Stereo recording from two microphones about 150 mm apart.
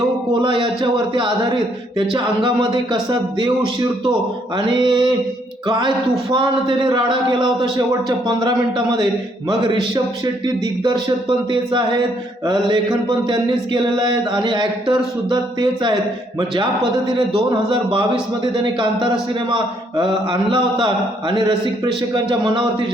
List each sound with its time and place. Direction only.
0.4 s a sound: 35° right (ahead or behind)
0.8 s mantra: 30° right (ahead or behind)
2.1 s speech: 30° right (ahead or behind)
6.3 s mantra: 30° right (ahead or behind)
8.0 s speech: 25° right (ahead or behind)
10.4 s mantra: 30° right (ahead or behind)
19.3 s mantra: 30° right (ahead or behind)